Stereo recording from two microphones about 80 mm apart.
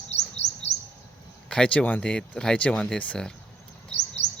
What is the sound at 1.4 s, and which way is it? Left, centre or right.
Speech, centre.